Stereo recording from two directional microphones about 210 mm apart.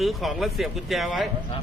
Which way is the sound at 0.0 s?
Centre (ahead or behind).